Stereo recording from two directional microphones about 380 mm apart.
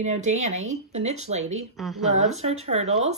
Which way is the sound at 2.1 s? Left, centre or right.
Centre.